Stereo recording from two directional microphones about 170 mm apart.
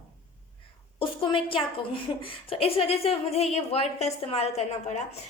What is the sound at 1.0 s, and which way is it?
A woman's voice, 30° left (ahead or behind).